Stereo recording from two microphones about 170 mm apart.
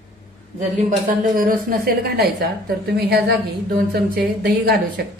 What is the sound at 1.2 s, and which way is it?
A woman's voice, 55° right (ahead or behind).